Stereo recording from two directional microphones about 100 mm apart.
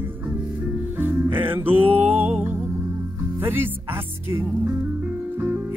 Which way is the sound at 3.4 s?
20° right (ahead or behind).